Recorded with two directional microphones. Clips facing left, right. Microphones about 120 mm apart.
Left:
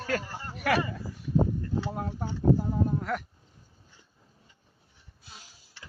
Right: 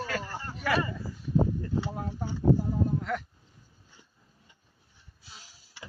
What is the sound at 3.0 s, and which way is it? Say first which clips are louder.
Speech: left 1 dB; 60° left (ahead or behind).